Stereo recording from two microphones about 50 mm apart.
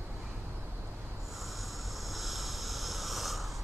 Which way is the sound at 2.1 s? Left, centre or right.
Centre.